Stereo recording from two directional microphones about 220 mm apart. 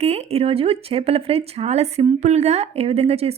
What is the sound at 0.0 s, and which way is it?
A woman's voice, 30° right (ahead or behind).